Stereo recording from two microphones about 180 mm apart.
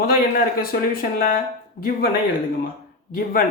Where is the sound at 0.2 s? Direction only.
55° left (ahead or behind).